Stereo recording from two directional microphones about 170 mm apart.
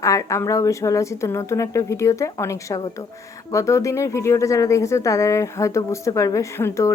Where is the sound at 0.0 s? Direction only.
20° left (ahead or behind).